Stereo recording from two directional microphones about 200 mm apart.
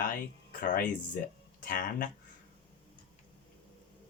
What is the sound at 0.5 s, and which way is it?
Speech, 45° left (ahead or behind).